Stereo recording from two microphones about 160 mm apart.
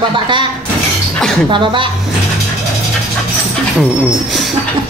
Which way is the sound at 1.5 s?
30° right (ahead or behind).